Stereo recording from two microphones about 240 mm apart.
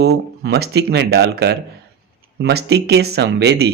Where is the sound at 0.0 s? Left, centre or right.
Right.